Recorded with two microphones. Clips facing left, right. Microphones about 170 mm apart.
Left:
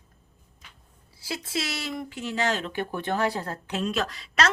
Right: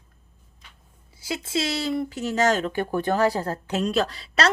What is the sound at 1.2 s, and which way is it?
Speech, 25° right (ahead or behind).